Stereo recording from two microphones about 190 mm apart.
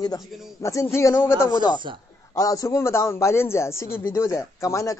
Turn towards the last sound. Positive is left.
turn(degrees=15)  # may be behind; listen again after turning